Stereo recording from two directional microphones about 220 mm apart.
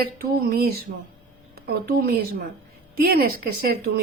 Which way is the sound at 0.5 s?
45° right (ahead or behind).